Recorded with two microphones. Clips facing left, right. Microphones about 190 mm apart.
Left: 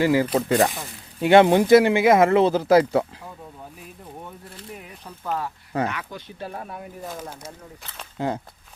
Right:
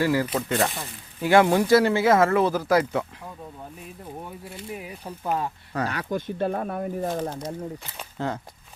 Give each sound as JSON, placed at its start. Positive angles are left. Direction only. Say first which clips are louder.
{"t": 0.0, "sound": "speech", "louder": "left 3 dB", "side_deg": 15}
{"t": 0.3, "sound": "speech", "louder": "left 5 dB", "side_deg": 35}
{"t": 0.7, "sound": "speech", "louder": "even", "side_deg": 0}
{"t": 1.2, "sound": "speech", "louder": "left 4 dB", "side_deg": 25}
{"t": 3.8, "sound": "speech", "louder": "right 2 dB", "side_deg": 0}
{"t": 5.2, "sound": "speech", "louder": "right 1 dB", "side_deg": -20}
{"t": 5.9, "sound": "speech", "louder": "right 6 dB", "side_deg": -45}
{"t": 8.2, "sound": "speech", "louder": "left 3 dB", "side_deg": 10}